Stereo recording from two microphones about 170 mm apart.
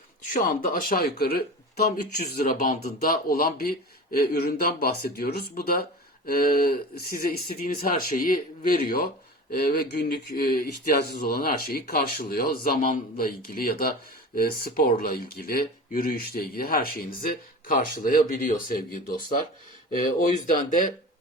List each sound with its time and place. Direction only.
0.3 s speech: 55° left (ahead or behind)